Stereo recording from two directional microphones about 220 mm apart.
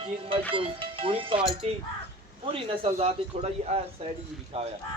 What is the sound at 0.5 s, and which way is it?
Speech, 25° right (ahead or behind).